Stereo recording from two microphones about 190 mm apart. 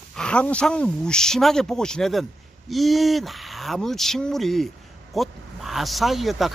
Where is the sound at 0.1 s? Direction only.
5° left (ahead or behind).